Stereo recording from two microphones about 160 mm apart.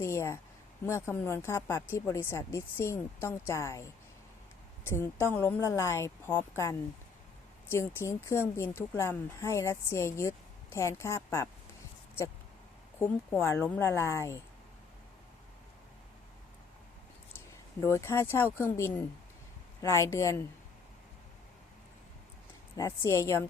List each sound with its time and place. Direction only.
0.0 s speech: 15° left (ahead or behind)
13.4 s speech: 10° left (ahead or behind)
17.3 s a woman's voice: 15° left (ahead or behind)
22.8 s a woman's voice: 20° left (ahead or behind)